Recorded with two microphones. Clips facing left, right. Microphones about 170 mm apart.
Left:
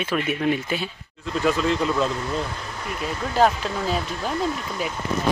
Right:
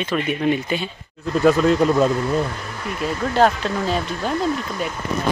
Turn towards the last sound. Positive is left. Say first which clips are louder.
# right 3 dB
turn(degrees=0)  # may be behind; listen again after turning